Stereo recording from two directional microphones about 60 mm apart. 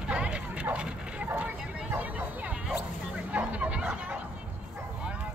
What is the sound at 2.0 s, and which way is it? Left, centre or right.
Vehicle, right.